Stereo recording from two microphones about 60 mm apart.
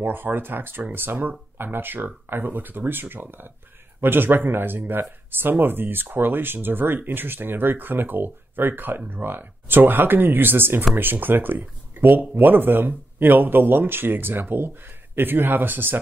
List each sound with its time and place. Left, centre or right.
0.0 s speech: right